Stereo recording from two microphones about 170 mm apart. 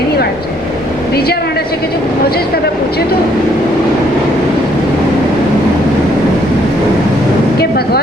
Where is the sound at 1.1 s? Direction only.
65° left (ahead or behind).